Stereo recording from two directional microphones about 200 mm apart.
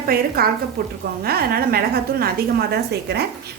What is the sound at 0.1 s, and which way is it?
A woman's voice, 45° right (ahead or behind).